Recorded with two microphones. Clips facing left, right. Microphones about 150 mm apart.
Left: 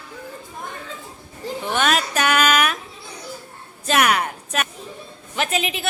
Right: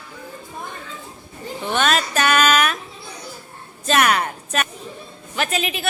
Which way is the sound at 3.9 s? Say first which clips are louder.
Right 1 dB; 10° left (ahead or behind).